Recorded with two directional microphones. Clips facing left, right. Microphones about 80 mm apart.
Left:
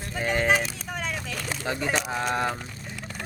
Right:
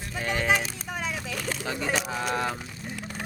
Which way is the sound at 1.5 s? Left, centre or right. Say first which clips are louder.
Left 2 dB; centre.